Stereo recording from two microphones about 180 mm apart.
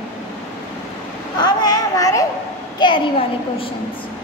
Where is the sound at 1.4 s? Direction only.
20° left (ahead or behind).